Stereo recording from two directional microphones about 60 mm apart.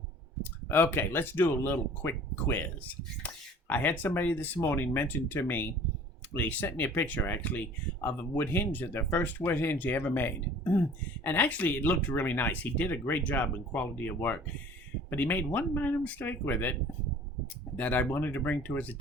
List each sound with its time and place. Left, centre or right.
0.7 s speech: left
17.7 s speech: left